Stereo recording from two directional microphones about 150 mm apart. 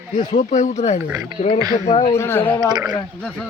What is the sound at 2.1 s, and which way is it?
Speech, 15° left (ahead or behind).